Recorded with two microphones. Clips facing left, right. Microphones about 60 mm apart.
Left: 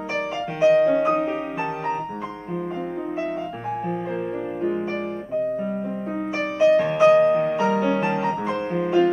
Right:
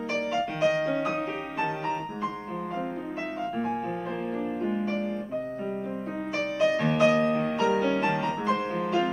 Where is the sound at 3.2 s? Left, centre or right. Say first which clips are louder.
Left 3 dB; centre.